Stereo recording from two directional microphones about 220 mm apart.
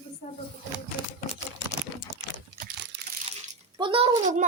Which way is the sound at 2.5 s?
50° right (ahead or behind).